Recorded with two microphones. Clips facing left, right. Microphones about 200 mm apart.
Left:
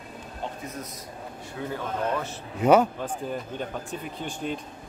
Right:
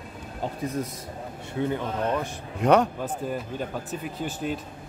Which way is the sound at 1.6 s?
20° right (ahead or behind).